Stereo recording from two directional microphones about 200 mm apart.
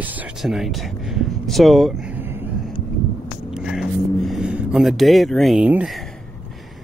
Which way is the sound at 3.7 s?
Centre (ahead or behind).